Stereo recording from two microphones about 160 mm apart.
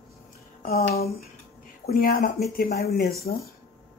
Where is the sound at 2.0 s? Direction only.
65° left (ahead or behind).